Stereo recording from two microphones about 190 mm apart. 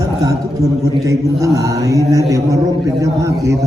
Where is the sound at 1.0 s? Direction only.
15° right (ahead or behind).